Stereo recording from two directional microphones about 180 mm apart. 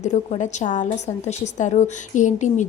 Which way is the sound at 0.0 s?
40° left (ahead or behind).